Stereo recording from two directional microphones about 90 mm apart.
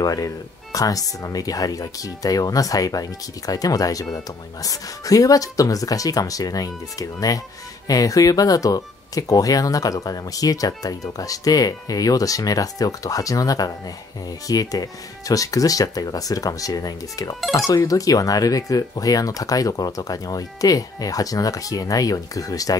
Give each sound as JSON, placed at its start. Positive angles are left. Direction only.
{"t": 0.0, "sound": "speech", "side_deg": 45}
{"t": 17.4, "sound": "speech", "side_deg": 0}
{"t": 17.6, "sound": "speech", "side_deg": 40}